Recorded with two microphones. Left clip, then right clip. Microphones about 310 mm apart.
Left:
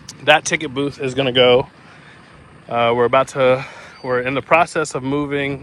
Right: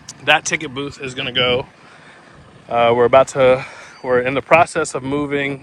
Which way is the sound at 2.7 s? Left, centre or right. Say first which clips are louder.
Right 3 dB; centre.